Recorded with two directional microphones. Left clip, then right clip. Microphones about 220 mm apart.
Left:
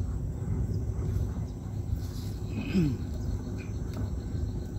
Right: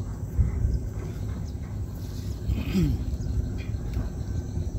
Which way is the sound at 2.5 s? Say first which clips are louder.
Right 1 dB; 45° right (ahead or behind).